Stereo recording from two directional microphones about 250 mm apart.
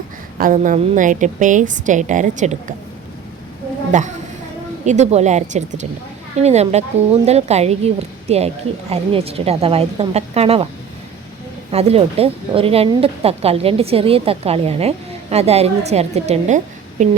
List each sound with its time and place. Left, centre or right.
0.3 s a woman's voice: right
3.9 s a woman's voice: right
11.7 s a woman's voice: right